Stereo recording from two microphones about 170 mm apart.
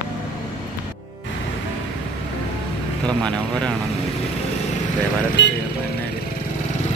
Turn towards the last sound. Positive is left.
turn(degrees=90)